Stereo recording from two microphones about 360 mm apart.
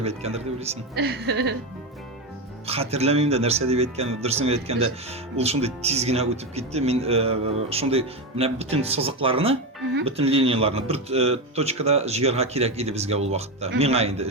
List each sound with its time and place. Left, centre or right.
0.0 s speech: centre
2.6 s speech: centre